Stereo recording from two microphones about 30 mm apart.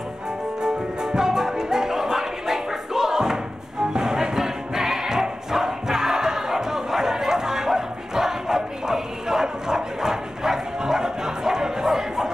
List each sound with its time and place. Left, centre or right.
0.6 s music: right